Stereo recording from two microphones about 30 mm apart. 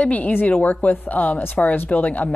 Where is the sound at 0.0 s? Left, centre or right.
Left.